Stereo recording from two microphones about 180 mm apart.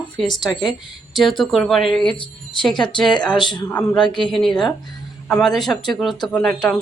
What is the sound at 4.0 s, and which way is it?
Speech, 25° left (ahead or behind).